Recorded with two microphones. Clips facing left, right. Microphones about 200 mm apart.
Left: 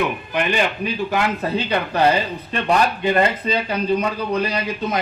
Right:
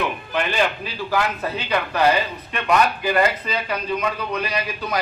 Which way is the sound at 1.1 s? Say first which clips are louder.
Even; 30° left (ahead or behind).